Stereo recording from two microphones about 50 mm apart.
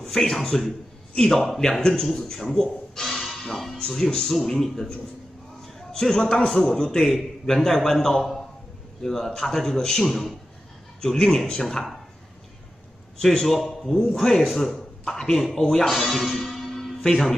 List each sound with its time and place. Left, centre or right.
0.0 s a man's voice: centre
2.5 s music: centre
3.8 s a man's voice: centre
11.6 s speech: centre
13.2 s a man's voice: centre
15.9 s music: centre